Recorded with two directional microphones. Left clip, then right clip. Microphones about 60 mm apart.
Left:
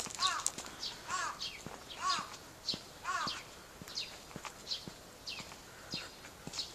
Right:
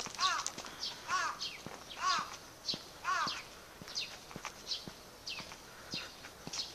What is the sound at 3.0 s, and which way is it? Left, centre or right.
Crow, right.